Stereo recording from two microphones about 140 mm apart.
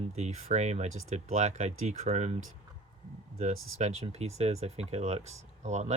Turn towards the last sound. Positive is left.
turn(degrees=-55)  # may be behind; listen again after turning